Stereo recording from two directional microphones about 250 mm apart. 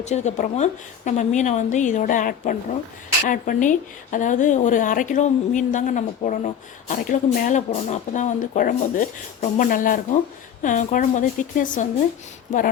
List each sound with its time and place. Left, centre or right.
0.0 s a woman's voice: left